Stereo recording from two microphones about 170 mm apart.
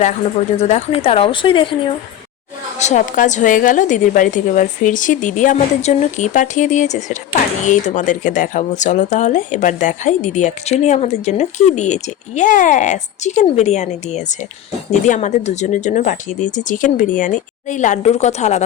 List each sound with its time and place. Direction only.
0.6 s a woman's voice: 40° left (ahead or behind)
2.7 s speech: 45° left (ahead or behind)